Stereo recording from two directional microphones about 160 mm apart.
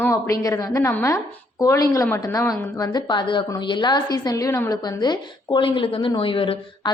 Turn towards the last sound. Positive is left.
turn(degrees=35)  # may be behind; listen again after turning